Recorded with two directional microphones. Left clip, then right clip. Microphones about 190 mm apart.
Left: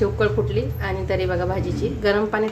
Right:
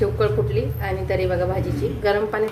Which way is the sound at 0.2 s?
15° left (ahead or behind).